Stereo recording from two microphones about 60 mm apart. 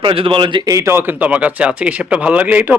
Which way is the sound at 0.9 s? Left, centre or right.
Right.